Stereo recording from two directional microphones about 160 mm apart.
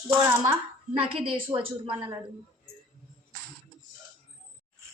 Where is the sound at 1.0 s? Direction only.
35° right (ahead or behind).